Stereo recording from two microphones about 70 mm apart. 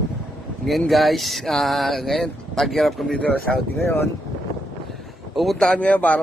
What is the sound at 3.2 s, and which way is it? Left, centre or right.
Speech, centre.